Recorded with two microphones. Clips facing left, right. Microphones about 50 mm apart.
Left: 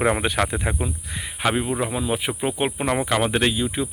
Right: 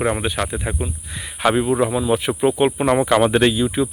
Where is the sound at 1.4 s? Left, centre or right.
Centre.